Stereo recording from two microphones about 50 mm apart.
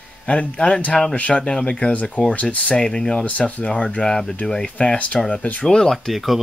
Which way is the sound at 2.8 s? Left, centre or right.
Centre.